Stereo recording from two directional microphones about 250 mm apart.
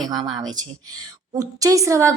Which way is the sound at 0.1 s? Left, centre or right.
Centre.